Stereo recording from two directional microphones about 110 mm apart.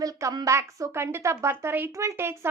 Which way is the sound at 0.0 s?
30° right (ahead or behind).